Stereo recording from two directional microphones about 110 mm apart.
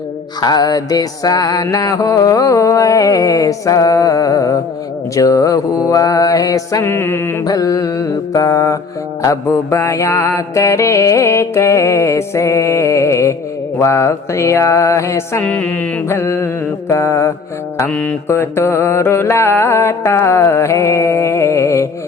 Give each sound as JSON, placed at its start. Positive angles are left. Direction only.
{"t": 0.4, "sound": "music", "side_deg": 35}
{"t": 6.9, "sound": "mantra", "side_deg": 20}
{"t": 7.4, "sound": "music", "side_deg": 30}
{"t": 9.2, "sound": "mantra", "side_deg": 25}
{"t": 15.4, "sound": "mantra", "side_deg": 15}